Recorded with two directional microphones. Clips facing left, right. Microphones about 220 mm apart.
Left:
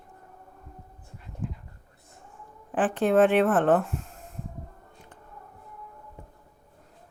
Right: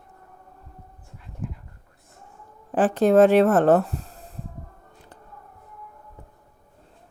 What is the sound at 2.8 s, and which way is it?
Speech, 40° right (ahead or behind).